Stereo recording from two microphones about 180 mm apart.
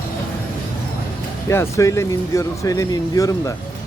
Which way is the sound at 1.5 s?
15° left (ahead or behind).